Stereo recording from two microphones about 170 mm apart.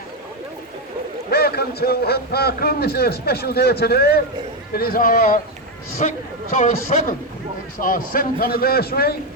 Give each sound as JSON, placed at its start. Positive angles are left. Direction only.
{"t": 1.3, "sound": "a man's voice", "side_deg": 70}
{"t": 7.8, "sound": "a man's voice", "side_deg": 55}